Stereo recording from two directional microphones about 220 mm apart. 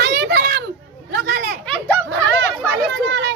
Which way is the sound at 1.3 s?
45° right (ahead or behind).